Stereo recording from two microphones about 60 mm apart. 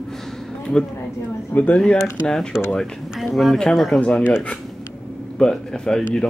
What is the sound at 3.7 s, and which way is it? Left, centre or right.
Speech, centre.